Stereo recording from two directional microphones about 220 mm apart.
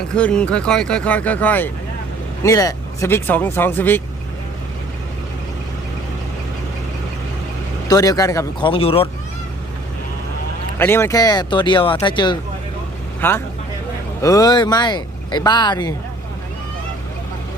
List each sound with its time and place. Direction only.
0.1 s speech: 5° left (ahead or behind)
7.9 s speech: 15° left (ahead or behind)
8.7 s speech: 25° left (ahead or behind)
10.8 s speech: 10° left (ahead or behind)
13.2 s speech: 10° left (ahead or behind)